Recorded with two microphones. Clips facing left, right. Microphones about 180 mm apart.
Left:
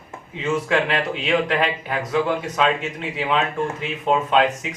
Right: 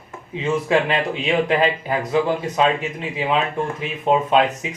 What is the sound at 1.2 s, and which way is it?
Speech, 30° right (ahead or behind).